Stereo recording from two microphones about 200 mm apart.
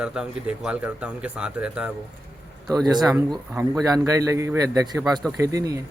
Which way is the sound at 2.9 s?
Centre (ahead or behind).